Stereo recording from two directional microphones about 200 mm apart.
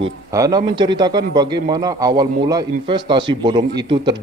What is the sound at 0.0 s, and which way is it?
Speech, 20° right (ahead or behind).